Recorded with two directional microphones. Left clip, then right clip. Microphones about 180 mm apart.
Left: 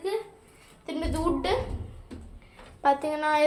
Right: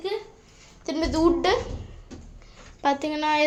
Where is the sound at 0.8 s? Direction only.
70° right (ahead or behind).